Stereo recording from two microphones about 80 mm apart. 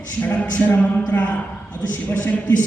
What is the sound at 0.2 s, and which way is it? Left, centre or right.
A man's voice, left.